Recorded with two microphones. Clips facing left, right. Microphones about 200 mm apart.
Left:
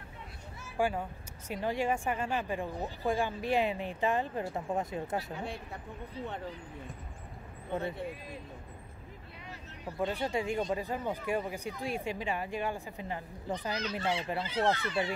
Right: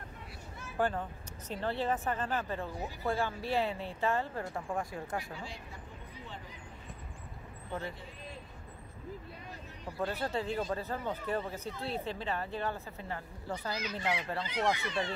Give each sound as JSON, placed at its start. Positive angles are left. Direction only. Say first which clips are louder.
{"t": 0.6, "sound": "a sound", "louder": "left 1 dB", "side_deg": 10}
{"t": 1.5, "sound": "speech", "louder": "left 2 dB", "side_deg": 15}
{"t": 5.3, "sound": "speech", "louder": "left 5 dB", "side_deg": 60}
{"t": 9.9, "sound": "speech", "louder": "left 2 dB", "side_deg": 15}
{"t": 13.7, "sound": "speech", "louder": "left 1 dB", "side_deg": -10}
{"t": 14.9, "sound": "speech", "louder": "left 3 dB", "side_deg": 10}